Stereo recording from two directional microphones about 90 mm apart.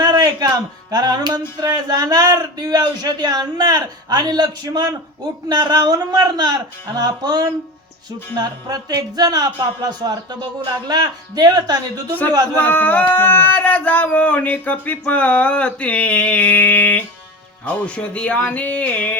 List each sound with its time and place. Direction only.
0.0 s speech: 45° right (ahead or behind)
12.5 s speech: 20° left (ahead or behind)